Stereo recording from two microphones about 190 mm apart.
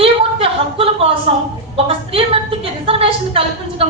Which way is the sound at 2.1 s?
30° right (ahead or behind).